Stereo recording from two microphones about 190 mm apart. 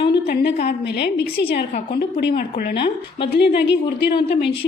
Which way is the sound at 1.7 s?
45° left (ahead or behind).